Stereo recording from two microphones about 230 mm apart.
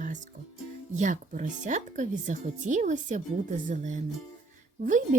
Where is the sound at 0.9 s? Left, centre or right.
Right.